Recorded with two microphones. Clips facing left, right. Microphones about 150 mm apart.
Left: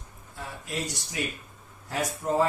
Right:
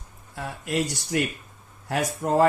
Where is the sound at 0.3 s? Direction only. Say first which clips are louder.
Right 7 dB; 70° right (ahead or behind).